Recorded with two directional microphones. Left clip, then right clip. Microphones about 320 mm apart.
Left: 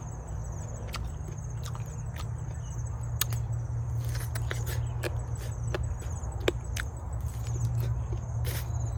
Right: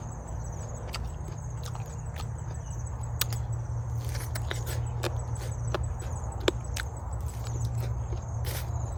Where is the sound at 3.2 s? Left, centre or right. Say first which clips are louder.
Right 1 dB; centre.